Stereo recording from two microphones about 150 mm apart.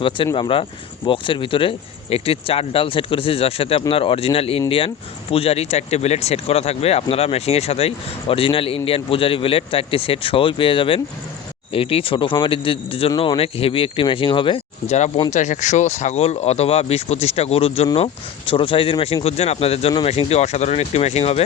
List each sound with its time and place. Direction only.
0.3 s speech: 35° left (ahead or behind)
14.8 s speech: 50° left (ahead or behind)